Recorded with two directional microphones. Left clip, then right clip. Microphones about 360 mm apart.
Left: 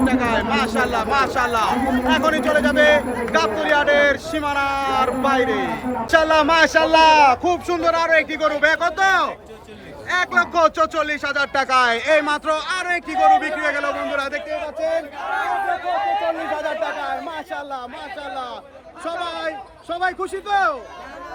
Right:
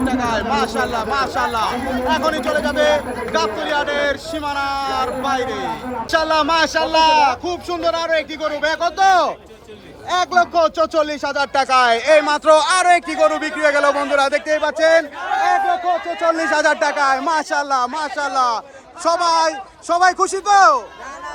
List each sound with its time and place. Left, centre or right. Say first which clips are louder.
0.0 s speech: even; centre; by 15.0 s right
16.4 s speech: right 7 dB; right